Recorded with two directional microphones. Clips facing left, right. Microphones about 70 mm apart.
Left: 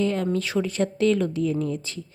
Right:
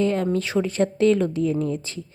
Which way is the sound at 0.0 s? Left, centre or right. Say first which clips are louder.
Right 2 dB; right.